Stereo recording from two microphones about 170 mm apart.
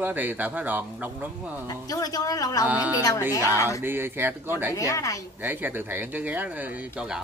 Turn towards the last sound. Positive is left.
turn(degrees=-5)  # may be behind; listen again after turning